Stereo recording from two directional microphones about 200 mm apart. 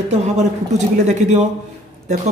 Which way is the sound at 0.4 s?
35° right (ahead or behind).